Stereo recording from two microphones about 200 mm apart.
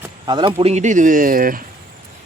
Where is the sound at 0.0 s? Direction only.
20° right (ahead or behind).